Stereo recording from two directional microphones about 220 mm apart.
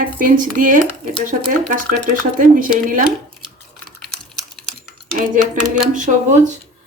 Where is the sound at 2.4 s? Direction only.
40° right (ahead or behind).